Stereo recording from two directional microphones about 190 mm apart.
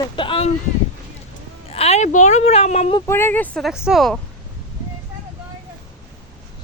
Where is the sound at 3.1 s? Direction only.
10° left (ahead or behind).